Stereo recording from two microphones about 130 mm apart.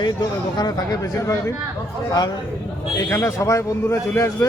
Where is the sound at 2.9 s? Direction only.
25° left (ahead or behind).